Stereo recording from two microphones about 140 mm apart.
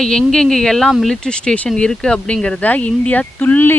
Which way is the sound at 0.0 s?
5° left (ahead or behind).